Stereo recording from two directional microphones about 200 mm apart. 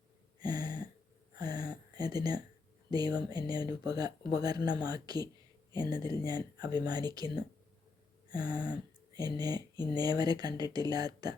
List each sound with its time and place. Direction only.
0.3 s a sound: 20° right (ahead or behind)
2.9 s speech: 20° right (ahead or behind)
8.3 s speech: 20° right (ahead or behind)